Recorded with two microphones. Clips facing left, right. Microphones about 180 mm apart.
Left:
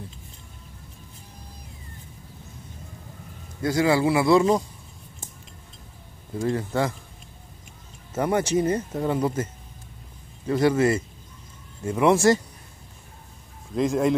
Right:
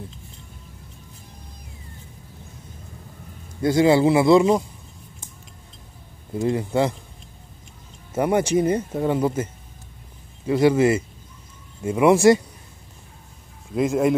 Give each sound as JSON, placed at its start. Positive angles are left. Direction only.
{"t": 3.6, "sound": "a man's voice", "side_deg": -25}
{"t": 6.4, "sound": "speech", "side_deg": -15}
{"t": 8.1, "sound": "speech", "side_deg": -10}
{"t": 13.7, "sound": "speech", "side_deg": -5}